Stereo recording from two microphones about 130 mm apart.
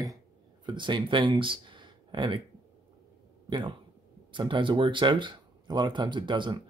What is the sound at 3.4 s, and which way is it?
Speech, 35° right (ahead or behind).